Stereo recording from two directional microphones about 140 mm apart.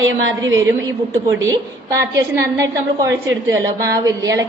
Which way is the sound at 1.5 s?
20° right (ahead or behind).